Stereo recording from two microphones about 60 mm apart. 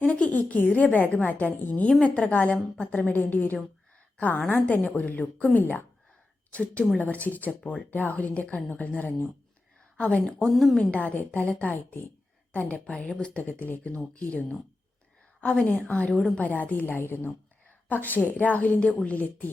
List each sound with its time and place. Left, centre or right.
0.0 s a woman's voice: left
6.5 s a woman's voice: left
10.0 s a woman's voice: centre
10.5 s a woman's voice: centre
10.8 s a woman's voice: left